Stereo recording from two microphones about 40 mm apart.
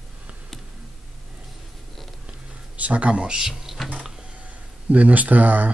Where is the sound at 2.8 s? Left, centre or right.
Right; by 3.8 s centre.